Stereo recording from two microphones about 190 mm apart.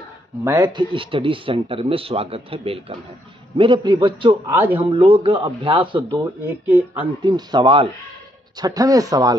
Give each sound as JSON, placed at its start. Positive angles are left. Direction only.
{"t": 0.4, "sound": "speech", "side_deg": -20}
{"t": 4.5, "sound": "speech", "side_deg": -10}
{"t": 4.8, "sound": "speech", "side_deg": -30}
{"t": 7.0, "sound": "speech", "side_deg": -25}